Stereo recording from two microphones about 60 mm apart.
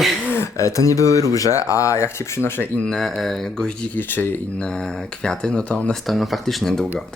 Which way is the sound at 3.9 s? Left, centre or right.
Left.